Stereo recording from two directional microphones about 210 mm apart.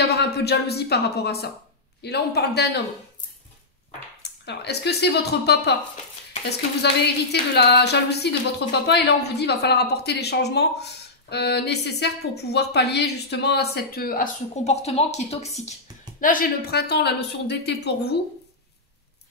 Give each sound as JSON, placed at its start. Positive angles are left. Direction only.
{"t": 0.0, "sound": "a woman's voice", "side_deg": 50}
{"t": 4.2, "sound": "speech", "side_deg": 50}
{"t": 6.8, "sound": "a woman's voice", "side_deg": 55}